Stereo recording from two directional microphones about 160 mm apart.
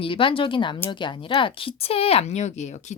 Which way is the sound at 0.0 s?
35° left (ahead or behind).